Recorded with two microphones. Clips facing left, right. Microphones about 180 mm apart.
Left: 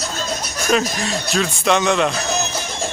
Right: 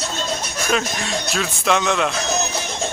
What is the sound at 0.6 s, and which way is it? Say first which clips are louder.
Speech: left 4 dB; centre (ahead or behind).